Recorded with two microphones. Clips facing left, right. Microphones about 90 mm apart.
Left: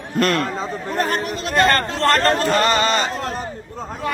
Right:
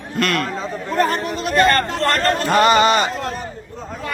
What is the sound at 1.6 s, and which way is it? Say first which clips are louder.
Chatter: right 1 dB; 25° left (ahead or behind).